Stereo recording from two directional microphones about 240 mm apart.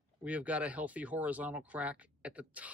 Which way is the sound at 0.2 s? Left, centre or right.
Centre.